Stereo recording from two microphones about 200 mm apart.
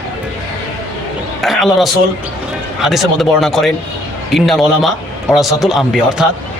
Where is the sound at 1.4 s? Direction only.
Centre (ahead or behind).